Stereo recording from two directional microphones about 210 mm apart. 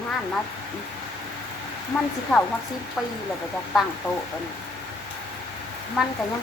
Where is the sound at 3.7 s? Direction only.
Centre (ahead or behind).